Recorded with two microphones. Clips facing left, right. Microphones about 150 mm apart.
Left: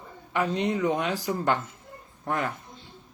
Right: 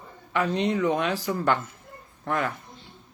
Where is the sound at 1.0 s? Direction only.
15° left (ahead or behind).